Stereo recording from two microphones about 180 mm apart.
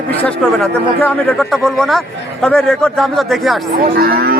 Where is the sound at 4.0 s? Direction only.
55° right (ahead or behind).